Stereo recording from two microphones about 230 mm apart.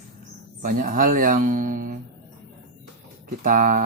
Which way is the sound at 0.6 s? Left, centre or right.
Right.